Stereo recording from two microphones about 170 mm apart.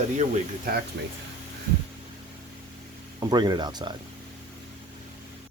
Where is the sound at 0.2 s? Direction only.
60° right (ahead or behind).